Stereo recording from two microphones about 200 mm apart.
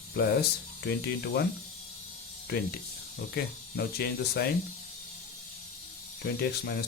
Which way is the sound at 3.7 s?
50° left (ahead or behind).